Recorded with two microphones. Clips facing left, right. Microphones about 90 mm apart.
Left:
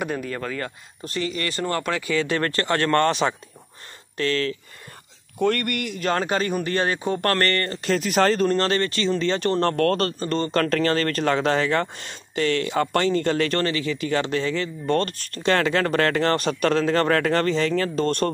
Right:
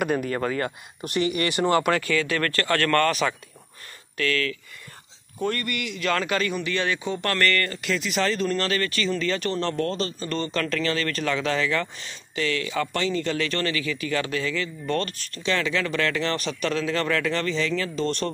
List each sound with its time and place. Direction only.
0.3 s speech: 10° right (ahead or behind)
2.0 s speech: 30° left (ahead or behind)
5.4 s speech: 55° left (ahead or behind)
10.2 s speech: 40° left (ahead or behind)